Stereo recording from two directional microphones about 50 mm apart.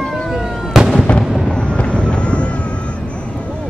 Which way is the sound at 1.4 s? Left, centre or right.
Left.